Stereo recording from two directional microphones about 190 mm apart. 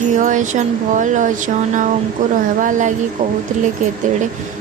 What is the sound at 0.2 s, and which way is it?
A woman's voice, 40° right (ahead or behind).